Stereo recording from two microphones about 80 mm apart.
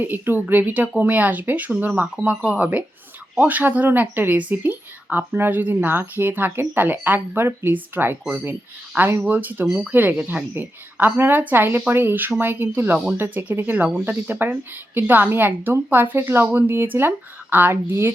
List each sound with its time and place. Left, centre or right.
0.0 s a woman's voice: right
9.2 s a woman's voice: right